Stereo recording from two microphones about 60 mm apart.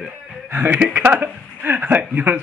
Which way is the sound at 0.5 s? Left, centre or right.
Right.